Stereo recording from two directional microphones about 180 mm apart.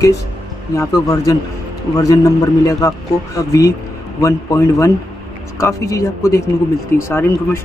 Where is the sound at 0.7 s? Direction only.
20° left (ahead or behind).